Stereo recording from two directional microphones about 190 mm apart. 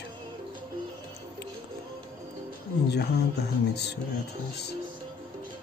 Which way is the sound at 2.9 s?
60° left (ahead or behind).